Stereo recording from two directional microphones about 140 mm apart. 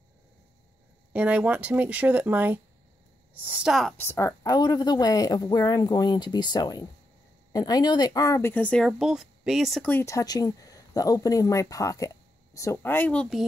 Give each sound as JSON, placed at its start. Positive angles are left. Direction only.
{"t": 1.1, "sound": "speech", "side_deg": -10}
{"t": 3.9, "sound": "speech", "side_deg": 15}
{"t": 8.8, "sound": "speech", "side_deg": 0}
{"t": 9.8, "sound": "speech", "side_deg": 20}